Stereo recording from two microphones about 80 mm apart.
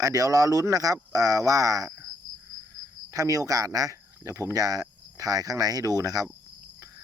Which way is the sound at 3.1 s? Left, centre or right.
Right.